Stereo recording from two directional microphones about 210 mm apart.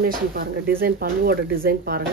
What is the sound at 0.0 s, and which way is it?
Speech, 45° right (ahead or behind).